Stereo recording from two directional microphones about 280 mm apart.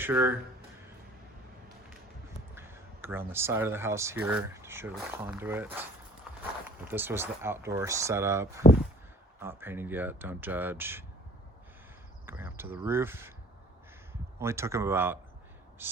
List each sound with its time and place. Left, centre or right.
0.0 s speech: centre
2.6 s speech: centre
6.8 s speech: centre
12.2 s speech: centre
14.3 s speech: centre
15.8 s a sound: centre